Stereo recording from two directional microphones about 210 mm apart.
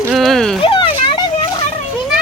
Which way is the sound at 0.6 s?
25° left (ahead or behind).